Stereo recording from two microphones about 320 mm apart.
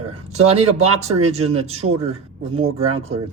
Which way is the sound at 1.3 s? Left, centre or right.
Centre.